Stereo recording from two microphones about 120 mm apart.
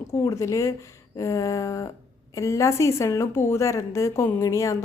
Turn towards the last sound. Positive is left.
turn(degrees=25)  # may be behind; listen again after turning